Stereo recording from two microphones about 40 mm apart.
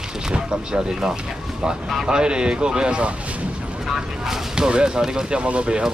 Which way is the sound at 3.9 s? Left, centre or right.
Centre.